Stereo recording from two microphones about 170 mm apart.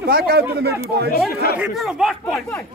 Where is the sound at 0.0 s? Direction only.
65° right (ahead or behind).